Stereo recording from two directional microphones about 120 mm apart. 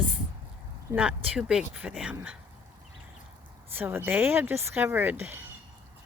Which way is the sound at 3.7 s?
15° right (ahead or behind).